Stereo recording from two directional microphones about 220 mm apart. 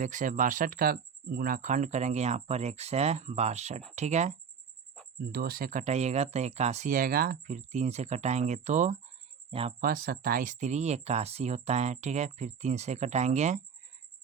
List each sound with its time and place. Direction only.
0.0 s speech: 35° right (ahead or behind)
5.3 s speech: 45° right (ahead or behind); by 9.7 s 25° right (ahead or behind)
9.8 s speech: 40° right (ahead or behind)